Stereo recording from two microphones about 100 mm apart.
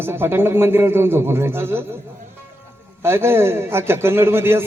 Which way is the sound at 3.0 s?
25° right (ahead or behind).